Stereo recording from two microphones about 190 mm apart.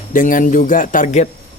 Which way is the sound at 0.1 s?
45° left (ahead or behind).